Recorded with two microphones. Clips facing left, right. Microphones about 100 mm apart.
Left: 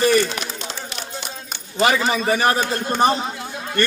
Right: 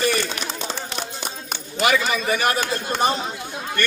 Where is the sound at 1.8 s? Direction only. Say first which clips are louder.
Left 2 dB; 30° left (ahead or behind).